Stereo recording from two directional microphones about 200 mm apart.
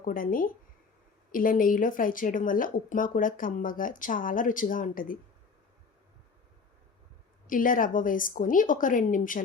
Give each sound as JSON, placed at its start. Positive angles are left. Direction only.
{"t": 0.0, "sound": "speech", "side_deg": 45}
{"t": 7.4, "sound": "a woman's voice", "side_deg": 45}